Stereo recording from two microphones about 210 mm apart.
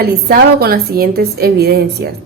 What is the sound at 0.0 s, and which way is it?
A woman's voice, 45° right (ahead or behind).